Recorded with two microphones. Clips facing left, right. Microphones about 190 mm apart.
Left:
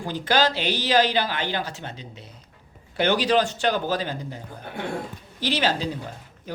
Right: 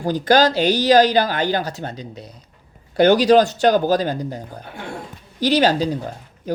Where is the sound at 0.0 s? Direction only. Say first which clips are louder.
Right 7 dB; 40° right (ahead or behind).